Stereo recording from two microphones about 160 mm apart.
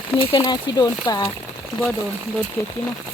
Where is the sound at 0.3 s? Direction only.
25° left (ahead or behind).